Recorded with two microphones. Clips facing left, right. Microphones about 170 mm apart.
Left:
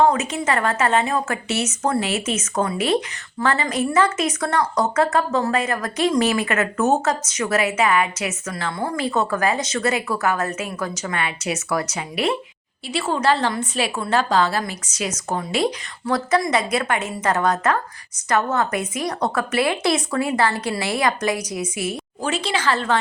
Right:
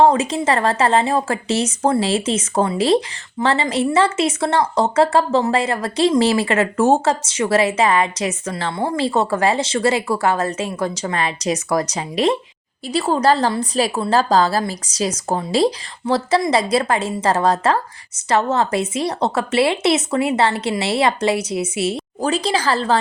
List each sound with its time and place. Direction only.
0.0 s a woman's voice: 30° right (ahead or behind)